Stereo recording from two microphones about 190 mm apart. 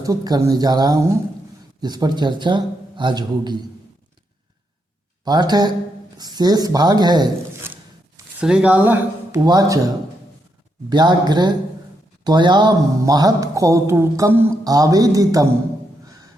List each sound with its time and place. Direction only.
0.0 s a man's voice: 20° right (ahead or behind)
5.2 s a man's voice: 20° right (ahead or behind)
7.7 s a sound: 10° right (ahead or behind)
10.8 s a man's voice: 20° right (ahead or behind)